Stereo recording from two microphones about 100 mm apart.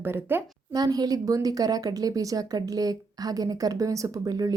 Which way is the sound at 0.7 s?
40° right (ahead or behind).